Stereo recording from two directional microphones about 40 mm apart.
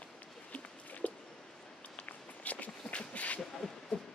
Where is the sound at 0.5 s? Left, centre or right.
Left.